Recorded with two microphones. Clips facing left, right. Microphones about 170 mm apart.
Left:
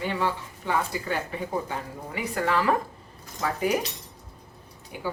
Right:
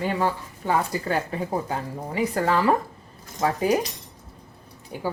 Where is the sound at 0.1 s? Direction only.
45° right (ahead or behind).